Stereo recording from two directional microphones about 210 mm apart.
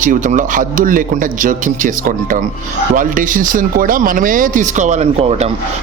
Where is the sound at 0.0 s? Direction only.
40° right (ahead or behind).